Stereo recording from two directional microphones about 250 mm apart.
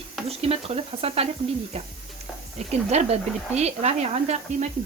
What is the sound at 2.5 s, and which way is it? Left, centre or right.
Speech, right.